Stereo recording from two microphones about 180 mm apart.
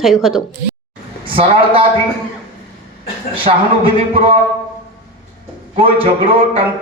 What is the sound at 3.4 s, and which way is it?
Speech, 30° right (ahead or behind).